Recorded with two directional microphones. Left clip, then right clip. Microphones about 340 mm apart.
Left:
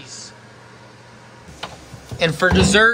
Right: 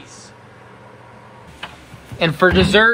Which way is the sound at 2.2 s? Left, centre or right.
Centre.